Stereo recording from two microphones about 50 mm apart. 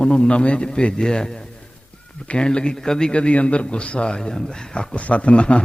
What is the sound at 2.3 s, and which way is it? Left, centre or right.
A man's voice, centre.